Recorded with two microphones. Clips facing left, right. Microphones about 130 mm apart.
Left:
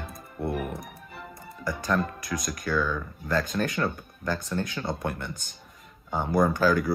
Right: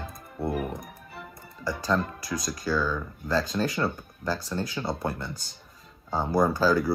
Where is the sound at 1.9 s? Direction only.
25° right (ahead or behind).